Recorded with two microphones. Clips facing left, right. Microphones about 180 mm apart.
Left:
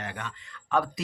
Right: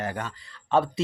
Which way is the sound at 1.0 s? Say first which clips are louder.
Right 7 dB; 30° right (ahead or behind).